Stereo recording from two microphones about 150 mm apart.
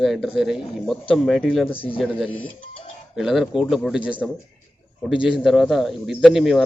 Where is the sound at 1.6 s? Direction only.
35° left (ahead or behind).